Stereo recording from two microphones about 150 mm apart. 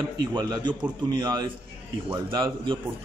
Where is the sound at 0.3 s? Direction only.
30° right (ahead or behind).